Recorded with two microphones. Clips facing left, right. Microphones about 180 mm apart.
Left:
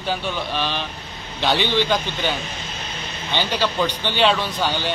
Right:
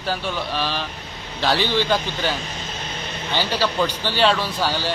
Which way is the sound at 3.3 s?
5° right (ahead or behind).